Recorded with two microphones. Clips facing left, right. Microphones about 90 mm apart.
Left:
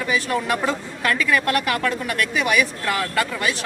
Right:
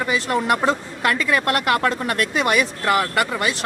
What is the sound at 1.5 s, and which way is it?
Speech, 35° right (ahead or behind).